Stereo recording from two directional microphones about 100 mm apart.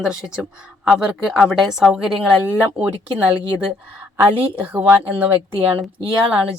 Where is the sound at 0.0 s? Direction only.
5° right (ahead or behind).